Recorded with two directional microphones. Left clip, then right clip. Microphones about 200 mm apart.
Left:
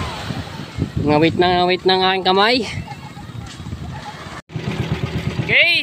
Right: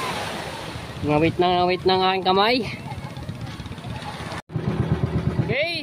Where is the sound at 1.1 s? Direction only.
20° left (ahead or behind).